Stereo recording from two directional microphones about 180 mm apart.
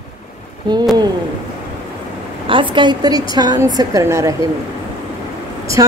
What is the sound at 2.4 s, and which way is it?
A woman's voice, 30° right (ahead or behind).